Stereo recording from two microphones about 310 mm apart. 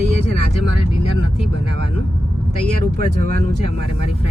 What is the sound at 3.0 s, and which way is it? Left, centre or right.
Speech, right.